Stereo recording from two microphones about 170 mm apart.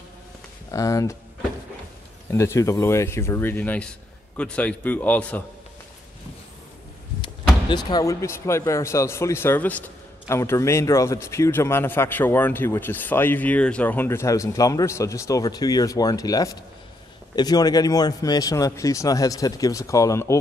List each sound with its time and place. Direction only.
0.7 s speech: 20° left (ahead or behind)
2.3 s speech: 15° left (ahead or behind)
7.7 s speech: 20° left (ahead or behind)